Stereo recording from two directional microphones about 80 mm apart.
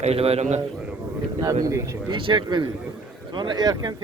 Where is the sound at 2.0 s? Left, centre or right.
Right.